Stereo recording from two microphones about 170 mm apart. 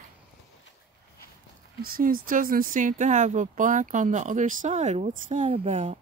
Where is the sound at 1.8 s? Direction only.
60° right (ahead or behind); by 6.0 s 40° right (ahead or behind).